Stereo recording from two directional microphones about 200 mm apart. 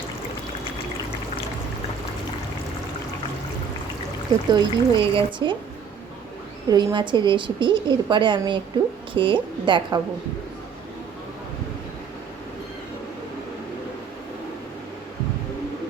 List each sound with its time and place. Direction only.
4.4 s a woman's voice: 25° right (ahead or behind)
6.7 s a woman's voice: 20° right (ahead or behind)